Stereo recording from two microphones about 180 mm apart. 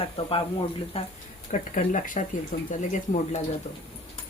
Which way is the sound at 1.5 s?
45° left (ahead or behind).